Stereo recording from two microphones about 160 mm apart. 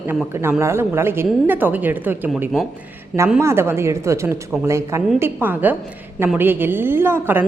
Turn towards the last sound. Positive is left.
turn(degrees=-15)  # may be behind; listen again after turning